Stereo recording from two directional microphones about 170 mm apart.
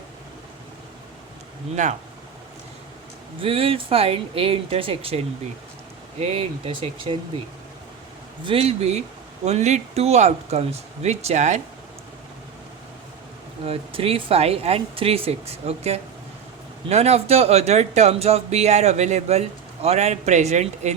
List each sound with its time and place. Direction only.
1.7 s speech: 45° right (ahead or behind)
3.4 s speech: 35° right (ahead or behind)
8.4 s speech: 35° right (ahead or behind)
13.7 s speech: 35° right (ahead or behind)